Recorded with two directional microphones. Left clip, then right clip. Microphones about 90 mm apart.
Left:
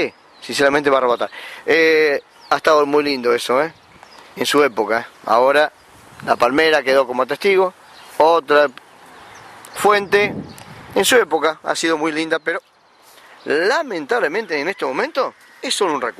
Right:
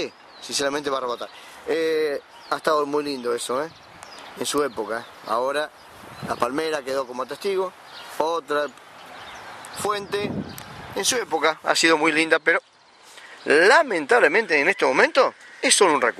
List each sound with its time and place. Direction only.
0.0 s speech: 15° left (ahead or behind)
4.9 s speech: 30° left (ahead or behind)
9.8 s speech: 20° left (ahead or behind)